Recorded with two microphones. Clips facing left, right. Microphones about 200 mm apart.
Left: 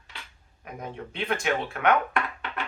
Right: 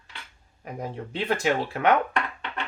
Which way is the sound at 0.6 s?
30° right (ahead or behind).